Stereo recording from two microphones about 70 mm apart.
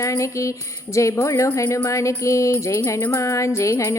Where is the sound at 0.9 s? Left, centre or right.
Left.